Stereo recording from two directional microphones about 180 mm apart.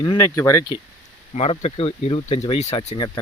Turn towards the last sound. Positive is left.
turn(degrees=30)  # may be behind; listen again after turning